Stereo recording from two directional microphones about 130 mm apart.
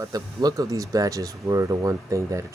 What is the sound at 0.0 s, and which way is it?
Speech, 30° right (ahead or behind).